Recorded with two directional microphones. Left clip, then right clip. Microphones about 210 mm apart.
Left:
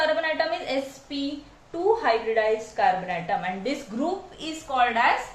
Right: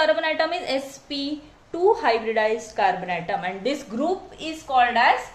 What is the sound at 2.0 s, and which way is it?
A woman's voice, 50° right (ahead or behind).